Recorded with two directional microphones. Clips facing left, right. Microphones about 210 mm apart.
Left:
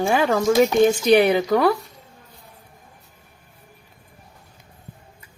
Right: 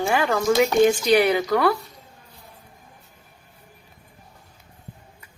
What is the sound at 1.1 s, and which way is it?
Speech, 25° left (ahead or behind).